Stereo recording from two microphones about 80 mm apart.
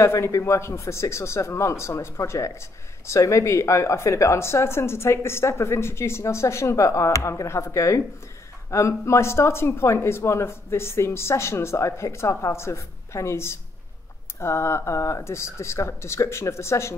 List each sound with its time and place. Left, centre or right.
0.0 s speech: left